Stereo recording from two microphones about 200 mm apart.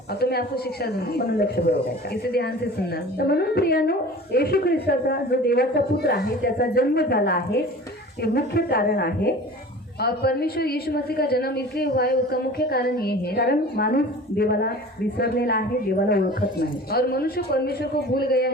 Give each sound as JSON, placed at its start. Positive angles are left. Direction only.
{"t": 0.2, "sound": "a woman's voice", "side_deg": 50}